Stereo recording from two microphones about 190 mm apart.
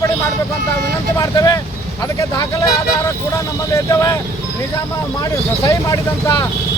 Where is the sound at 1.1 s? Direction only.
15° left (ahead or behind).